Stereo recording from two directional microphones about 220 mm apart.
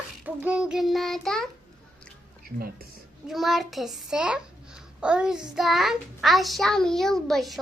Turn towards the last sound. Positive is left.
turn(degrees=0)  # may be behind; listen again after turning